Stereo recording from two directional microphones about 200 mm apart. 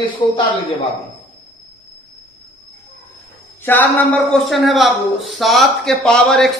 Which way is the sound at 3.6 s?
10° left (ahead or behind).